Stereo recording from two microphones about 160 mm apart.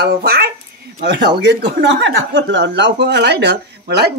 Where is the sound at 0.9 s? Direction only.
90° right.